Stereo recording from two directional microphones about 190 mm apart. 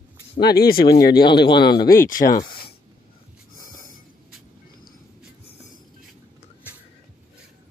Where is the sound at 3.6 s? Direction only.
50° left (ahead or behind).